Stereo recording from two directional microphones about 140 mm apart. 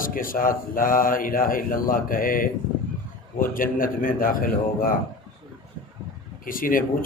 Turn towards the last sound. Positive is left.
turn(degrees=80)